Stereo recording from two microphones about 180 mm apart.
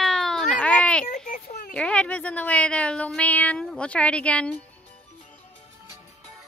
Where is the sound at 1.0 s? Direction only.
50° left (ahead or behind).